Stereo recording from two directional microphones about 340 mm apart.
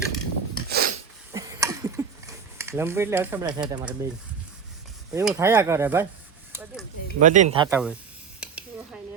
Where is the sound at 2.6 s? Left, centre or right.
Centre.